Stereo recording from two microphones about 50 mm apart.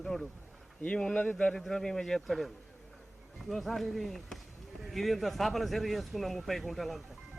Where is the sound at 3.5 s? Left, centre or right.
Centre.